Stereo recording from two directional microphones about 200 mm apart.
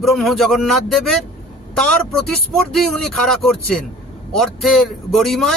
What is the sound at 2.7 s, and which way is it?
A man's voice, centre (ahead or behind).